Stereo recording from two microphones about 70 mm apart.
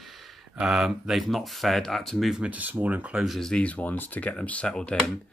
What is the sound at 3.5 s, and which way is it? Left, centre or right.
Speech, centre.